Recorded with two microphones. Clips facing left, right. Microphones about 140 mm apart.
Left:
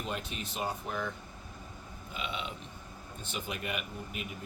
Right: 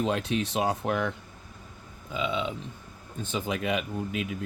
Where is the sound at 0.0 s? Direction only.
90° right.